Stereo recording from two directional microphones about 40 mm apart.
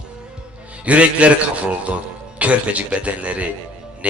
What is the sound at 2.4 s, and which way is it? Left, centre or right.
A man's voice, right.